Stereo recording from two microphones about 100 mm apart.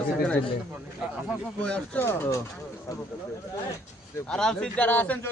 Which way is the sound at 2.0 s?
25° left (ahead or behind).